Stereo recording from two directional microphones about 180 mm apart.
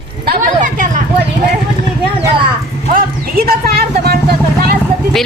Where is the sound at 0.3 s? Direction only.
45° right (ahead or behind).